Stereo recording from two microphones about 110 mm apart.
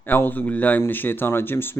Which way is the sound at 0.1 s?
15° left (ahead or behind).